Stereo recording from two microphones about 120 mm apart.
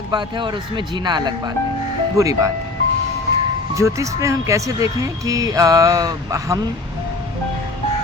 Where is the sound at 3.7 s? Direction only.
25° right (ahead or behind).